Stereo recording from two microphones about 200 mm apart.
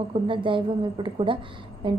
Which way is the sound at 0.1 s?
25° right (ahead or behind).